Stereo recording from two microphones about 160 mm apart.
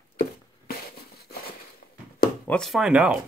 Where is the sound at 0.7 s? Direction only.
70° left (ahead or behind).